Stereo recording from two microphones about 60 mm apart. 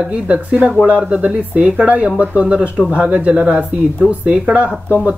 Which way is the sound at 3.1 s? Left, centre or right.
Centre.